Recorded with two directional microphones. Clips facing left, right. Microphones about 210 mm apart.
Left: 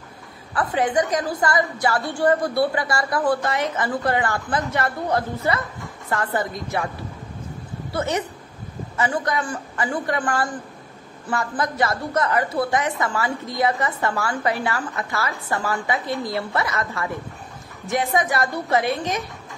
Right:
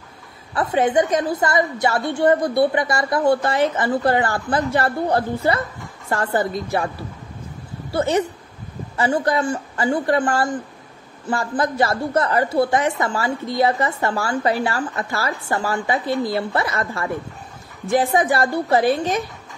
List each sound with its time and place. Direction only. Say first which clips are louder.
0.6 s a woman's voice: right 3 dB; 25° right (ahead or behind)
7.9 s a woman's voice: right 5 dB; 30° right (ahead or behind)